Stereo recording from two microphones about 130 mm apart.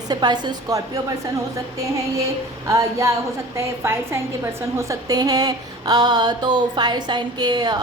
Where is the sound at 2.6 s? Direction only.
25° right (ahead or behind).